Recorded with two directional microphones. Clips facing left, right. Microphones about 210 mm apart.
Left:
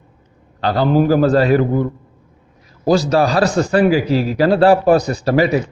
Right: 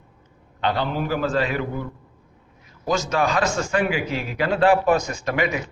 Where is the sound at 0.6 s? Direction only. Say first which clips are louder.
Left 9 dB; 35° left (ahead or behind).